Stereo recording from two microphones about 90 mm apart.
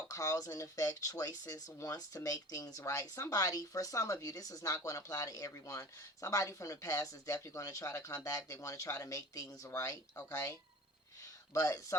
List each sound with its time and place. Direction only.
0.1 s speech: 40° left (ahead or behind)
11.5 s speech: 35° left (ahead or behind)